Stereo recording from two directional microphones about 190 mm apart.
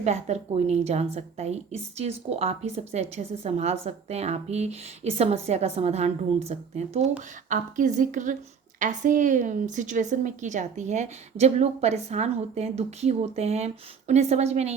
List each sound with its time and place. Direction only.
0.0 s a woman's voice: 35° right (ahead or behind)